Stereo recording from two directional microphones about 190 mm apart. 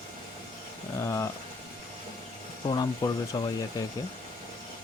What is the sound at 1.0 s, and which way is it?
Speech, 15° left (ahead or behind).